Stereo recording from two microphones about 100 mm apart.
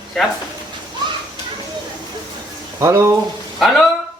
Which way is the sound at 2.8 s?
30° right (ahead or behind).